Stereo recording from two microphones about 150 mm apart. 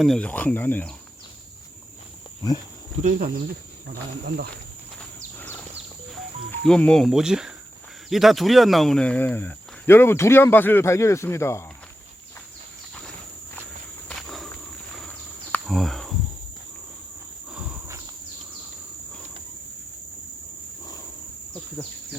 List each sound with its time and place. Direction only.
0.0 s a man's voice: 5° left (ahead or behind)
3.0 s speech: 60° right (ahead or behind)
4.9 s a sound: 15° left (ahead or behind)
6.5 s a man's voice: 5° left (ahead or behind)
14.1 s walk: 5° left (ahead or behind)
15.6 s cricket: centre (ahead or behind)
17.5 s walk: 5° right (ahead or behind)
17.8 s a sound: 20° right (ahead or behind)
21.8 s bird: 20° left (ahead or behind)